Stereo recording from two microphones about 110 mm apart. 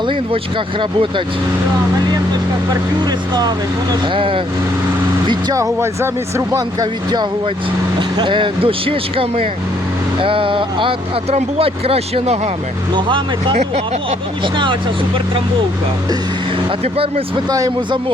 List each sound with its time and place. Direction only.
0.8 s speech: 50° right (ahead or behind)
2.6 s speech: 40° right (ahead or behind)
4.0 s speech: 50° right (ahead or behind)
5.5 s speech: 25° right (ahead or behind)
7.9 s speech: 45° right (ahead or behind)
11.3 s speech: 70° right (ahead or behind)
12.9 s speech: 50° right (ahead or behind)
16.8 s speech: 60° right (ahead or behind)
17.5 s speech: 35° right (ahead or behind)